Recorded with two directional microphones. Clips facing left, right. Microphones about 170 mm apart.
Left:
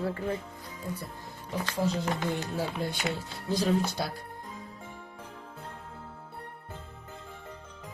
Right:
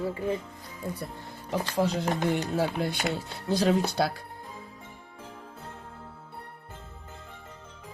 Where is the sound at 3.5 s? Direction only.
70° right (ahead or behind).